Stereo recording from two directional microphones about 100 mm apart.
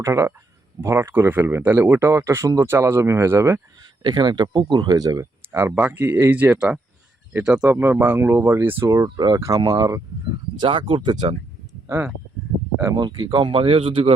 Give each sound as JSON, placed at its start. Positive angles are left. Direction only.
{"t": 0.0, "sound": "speech", "side_deg": -30}
{"t": 4.0, "sound": "speech", "side_deg": -45}
{"t": 5.5, "sound": "speech", "side_deg": -20}
{"t": 7.7, "sound": "speech", "side_deg": -20}
{"t": 9.0, "sound": "speech", "side_deg": -40}
{"t": 10.6, "sound": "speech", "side_deg": -60}
{"t": 11.9, "sound": "speech", "side_deg": -20}
{"t": 12.9, "sound": "speech", "side_deg": -45}